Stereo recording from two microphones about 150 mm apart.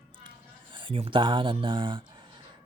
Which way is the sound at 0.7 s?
35° right (ahead or behind).